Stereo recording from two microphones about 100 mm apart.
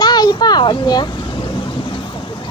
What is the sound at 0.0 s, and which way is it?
Speech, 45° left (ahead or behind).